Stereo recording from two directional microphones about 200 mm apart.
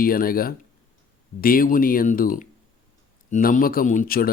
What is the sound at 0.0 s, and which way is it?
Speech, 45° left (ahead or behind).